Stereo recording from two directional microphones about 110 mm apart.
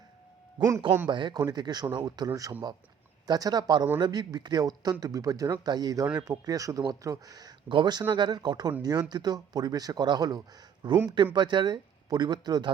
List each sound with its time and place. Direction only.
0.6 s a man's voice: 45° right (ahead or behind)